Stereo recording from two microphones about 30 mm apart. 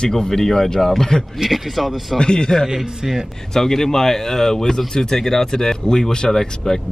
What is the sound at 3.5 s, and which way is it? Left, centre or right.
Speech, centre.